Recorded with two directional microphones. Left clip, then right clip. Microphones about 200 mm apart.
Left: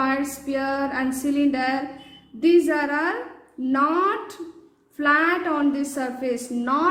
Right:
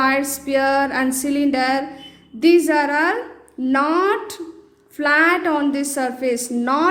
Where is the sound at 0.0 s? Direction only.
30° right (ahead or behind).